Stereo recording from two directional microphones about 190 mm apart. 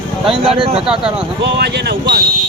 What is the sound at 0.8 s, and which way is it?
Speech, 5° right (ahead or behind).